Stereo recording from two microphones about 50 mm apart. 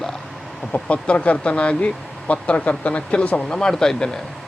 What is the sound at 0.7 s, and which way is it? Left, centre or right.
Speech, left.